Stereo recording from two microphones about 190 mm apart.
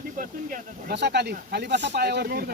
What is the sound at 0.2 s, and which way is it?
Speech, 45° right (ahead or behind).